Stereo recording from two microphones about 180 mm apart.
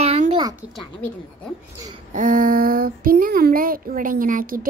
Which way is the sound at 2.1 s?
45° right (ahead or behind).